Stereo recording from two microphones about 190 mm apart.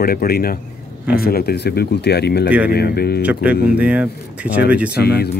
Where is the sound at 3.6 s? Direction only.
5° right (ahead or behind).